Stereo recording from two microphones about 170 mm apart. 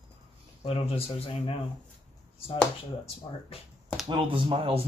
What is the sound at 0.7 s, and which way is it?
Speech, 35° left (ahead or behind).